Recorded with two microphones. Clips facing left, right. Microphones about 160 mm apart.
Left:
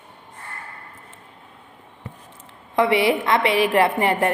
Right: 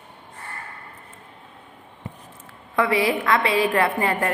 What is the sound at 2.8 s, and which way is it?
A woman's voice, 25° left (ahead or behind).